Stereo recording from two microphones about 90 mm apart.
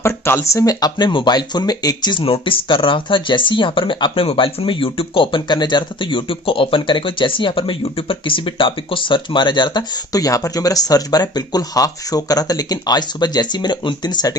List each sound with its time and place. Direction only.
0.5 s speech: 40° left (ahead or behind)